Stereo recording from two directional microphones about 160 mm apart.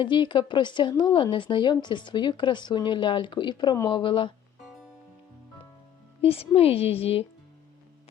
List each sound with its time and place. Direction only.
0.0 s a woman's voice: 30° left (ahead or behind)
6.2 s a woman's voice: 40° left (ahead or behind)